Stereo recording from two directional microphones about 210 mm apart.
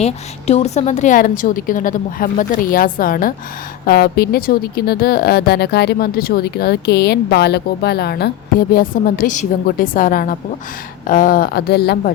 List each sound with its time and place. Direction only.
0.0 s a woman's voice: 30° left (ahead or behind); by 12.1 s 50° left (ahead or behind)